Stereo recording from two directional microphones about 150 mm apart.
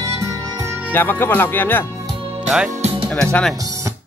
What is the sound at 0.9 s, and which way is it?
Speech, 15° left (ahead or behind).